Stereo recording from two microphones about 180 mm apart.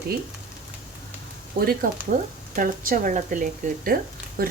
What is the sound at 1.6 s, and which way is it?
Speech, 55° right (ahead or behind).